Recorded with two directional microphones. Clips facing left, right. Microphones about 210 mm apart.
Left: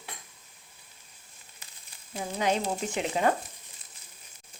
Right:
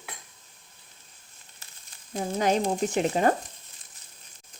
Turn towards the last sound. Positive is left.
turn(degrees=-40)  # may be behind; listen again after turning